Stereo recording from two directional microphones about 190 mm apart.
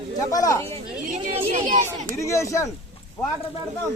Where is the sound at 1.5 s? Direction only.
40° right (ahead or behind).